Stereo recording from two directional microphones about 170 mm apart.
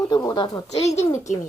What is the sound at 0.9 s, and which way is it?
Speech, 45° left (ahead or behind).